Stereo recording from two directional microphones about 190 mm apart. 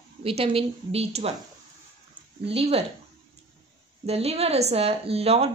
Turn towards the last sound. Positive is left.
turn(degrees=-30)  # may be behind; listen again after turning